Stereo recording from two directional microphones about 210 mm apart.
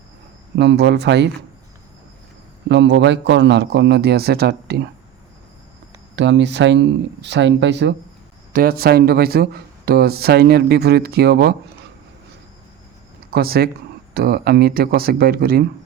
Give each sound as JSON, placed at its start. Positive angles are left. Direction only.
{"t": 0.5, "sound": "speech", "side_deg": -50}
{"t": 2.6, "sound": "speech", "side_deg": -55}
{"t": 6.1, "sound": "speech", "side_deg": -55}
{"t": 8.5, "sound": "speech", "side_deg": -45}
{"t": 13.3, "sound": "speech", "side_deg": -45}